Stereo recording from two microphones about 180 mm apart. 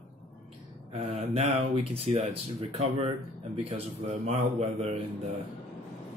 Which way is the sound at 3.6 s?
35° right (ahead or behind).